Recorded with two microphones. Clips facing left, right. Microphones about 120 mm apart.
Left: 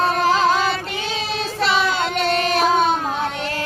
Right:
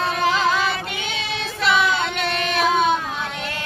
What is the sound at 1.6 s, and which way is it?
Child singing, 35° left (ahead or behind).